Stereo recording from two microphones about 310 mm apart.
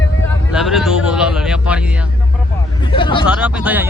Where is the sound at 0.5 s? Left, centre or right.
Centre.